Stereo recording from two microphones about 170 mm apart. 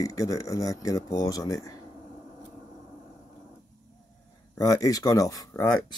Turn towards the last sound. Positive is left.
turn(degrees=20)  # may be behind; listen again after turning